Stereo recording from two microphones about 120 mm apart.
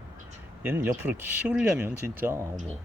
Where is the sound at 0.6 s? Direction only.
15° right (ahead or behind).